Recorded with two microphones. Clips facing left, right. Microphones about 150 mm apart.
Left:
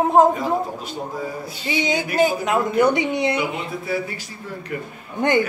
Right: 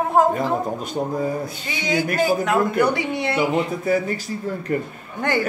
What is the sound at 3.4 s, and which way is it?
Speech, 45° right (ahead or behind).